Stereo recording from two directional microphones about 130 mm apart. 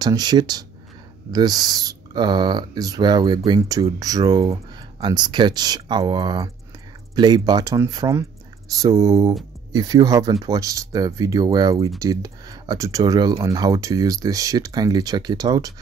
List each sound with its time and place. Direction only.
0.0 s speech: 30° right (ahead or behind)